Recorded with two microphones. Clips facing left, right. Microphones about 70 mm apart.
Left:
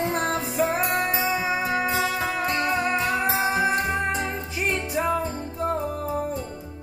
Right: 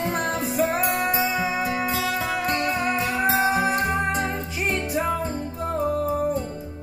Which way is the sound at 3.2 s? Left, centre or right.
Right.